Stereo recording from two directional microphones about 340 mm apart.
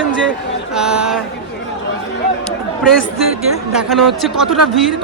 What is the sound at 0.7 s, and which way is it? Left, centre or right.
Speech, centre.